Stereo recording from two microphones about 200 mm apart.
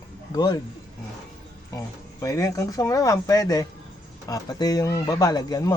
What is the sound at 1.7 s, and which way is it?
Speech, 15° left (ahead or behind).